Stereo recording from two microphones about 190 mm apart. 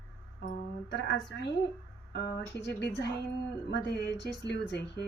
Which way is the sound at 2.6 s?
65° left (ahead or behind).